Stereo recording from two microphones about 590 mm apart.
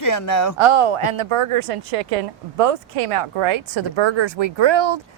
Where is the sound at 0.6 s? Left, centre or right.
Right.